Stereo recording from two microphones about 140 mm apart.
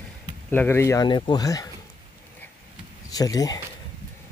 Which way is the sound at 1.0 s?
35° left (ahead or behind).